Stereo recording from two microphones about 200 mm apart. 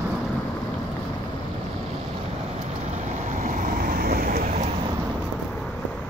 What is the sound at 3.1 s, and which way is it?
Vehicle, 40° right (ahead or behind).